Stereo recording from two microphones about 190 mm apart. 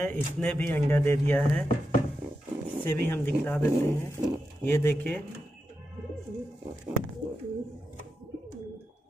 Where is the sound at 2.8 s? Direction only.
10° left (ahead or behind).